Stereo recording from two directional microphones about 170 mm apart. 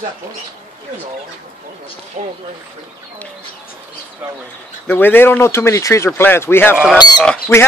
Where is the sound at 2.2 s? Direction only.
40° right (ahead or behind).